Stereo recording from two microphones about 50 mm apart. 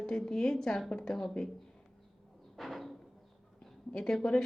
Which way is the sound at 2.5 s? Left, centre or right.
Centre.